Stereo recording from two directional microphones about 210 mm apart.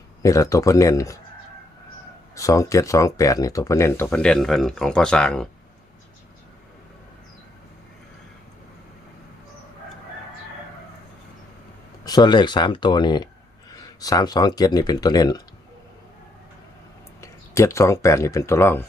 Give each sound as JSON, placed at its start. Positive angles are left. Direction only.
{"t": 0.2, "sound": "speech", "side_deg": 15}
{"t": 2.3, "sound": "speech", "side_deg": 15}
{"t": 12.0, "sound": "speech", "side_deg": 20}
{"t": 17.2, "sound": "speech", "side_deg": 15}